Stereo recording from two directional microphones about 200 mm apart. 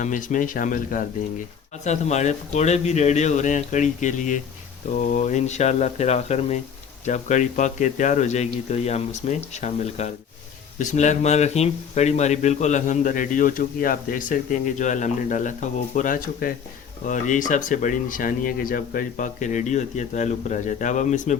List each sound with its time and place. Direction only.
0.0 s speech: 40° left (ahead or behind)